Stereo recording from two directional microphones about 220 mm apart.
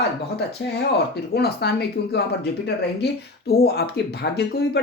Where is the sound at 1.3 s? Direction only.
45° left (ahead or behind).